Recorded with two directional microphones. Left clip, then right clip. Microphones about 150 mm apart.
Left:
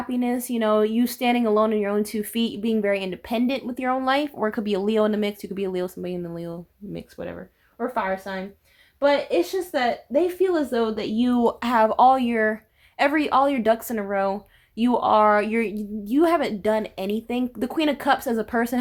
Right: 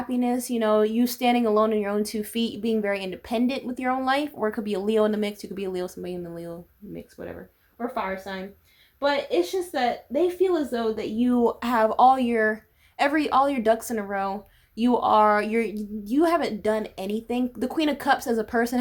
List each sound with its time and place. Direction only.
0.1 s speech: 25° left (ahead or behind)
6.9 s speech: 55° left (ahead or behind)
7.8 s speech: 40° left (ahead or behind); by 18.8 s 25° left (ahead or behind)